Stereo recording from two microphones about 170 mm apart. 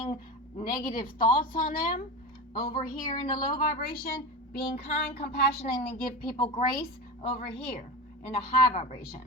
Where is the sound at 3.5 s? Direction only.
60° left (ahead or behind).